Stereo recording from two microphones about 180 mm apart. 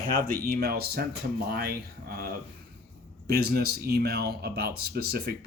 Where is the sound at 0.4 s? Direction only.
60° right (ahead or behind).